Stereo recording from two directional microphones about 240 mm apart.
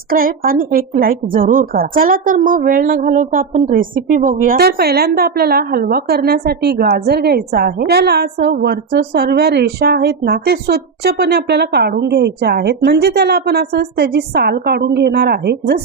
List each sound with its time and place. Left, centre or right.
0.1 s a woman's voice: right